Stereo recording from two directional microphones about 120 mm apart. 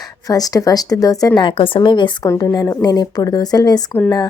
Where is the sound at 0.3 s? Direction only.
30° left (ahead or behind).